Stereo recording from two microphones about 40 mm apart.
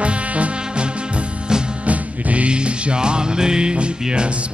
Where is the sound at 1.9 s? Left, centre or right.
Right.